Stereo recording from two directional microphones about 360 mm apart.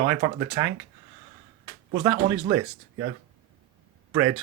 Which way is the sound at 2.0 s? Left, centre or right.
Centre.